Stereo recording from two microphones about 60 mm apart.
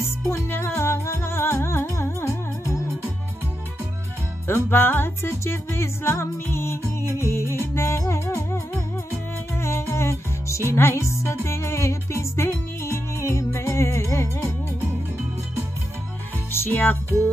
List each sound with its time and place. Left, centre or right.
0.3 s music: left
4.5 s music: left
16.6 s music: left